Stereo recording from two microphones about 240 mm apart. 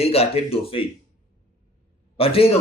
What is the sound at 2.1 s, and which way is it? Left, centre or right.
Speech, left.